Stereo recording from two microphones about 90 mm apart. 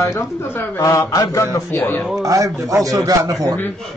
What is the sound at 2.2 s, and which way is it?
A man's voice, 40° right (ahead or behind).